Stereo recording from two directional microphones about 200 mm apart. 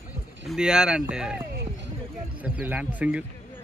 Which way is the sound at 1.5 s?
55° right (ahead or behind).